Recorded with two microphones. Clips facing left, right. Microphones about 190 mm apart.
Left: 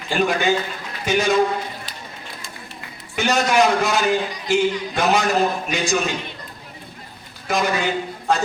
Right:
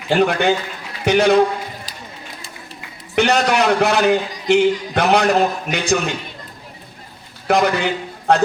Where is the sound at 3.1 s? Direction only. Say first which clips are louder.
Right 2 dB; 65° right (ahead or behind).